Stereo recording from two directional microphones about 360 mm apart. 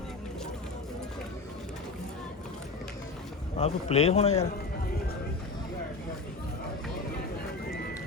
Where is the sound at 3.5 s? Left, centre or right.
Centre.